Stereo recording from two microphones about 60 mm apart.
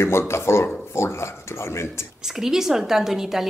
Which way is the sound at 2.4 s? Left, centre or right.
Centre.